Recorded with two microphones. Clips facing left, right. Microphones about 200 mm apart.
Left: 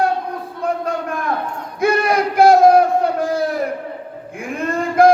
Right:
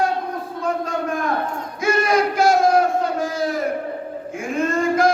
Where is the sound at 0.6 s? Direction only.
60° left (ahead or behind).